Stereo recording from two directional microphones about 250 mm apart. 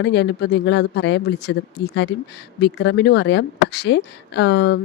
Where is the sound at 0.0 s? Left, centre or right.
Left.